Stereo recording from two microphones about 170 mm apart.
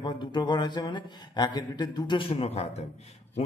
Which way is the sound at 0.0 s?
25° left (ahead or behind).